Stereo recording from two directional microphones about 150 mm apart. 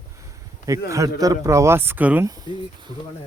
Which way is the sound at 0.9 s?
20° right (ahead or behind).